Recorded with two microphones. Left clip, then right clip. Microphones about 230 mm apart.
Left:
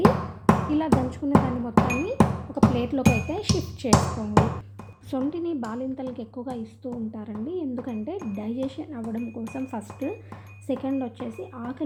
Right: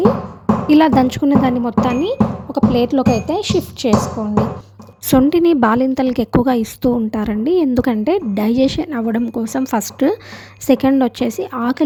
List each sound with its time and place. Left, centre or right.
0.7 s speech: right
5.1 s a woman's voice: right